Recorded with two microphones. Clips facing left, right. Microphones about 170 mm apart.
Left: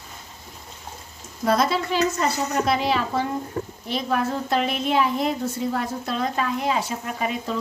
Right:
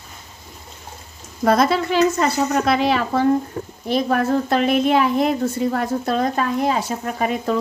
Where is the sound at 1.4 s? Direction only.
60° right (ahead or behind).